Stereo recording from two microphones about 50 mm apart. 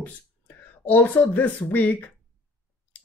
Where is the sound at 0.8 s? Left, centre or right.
Left.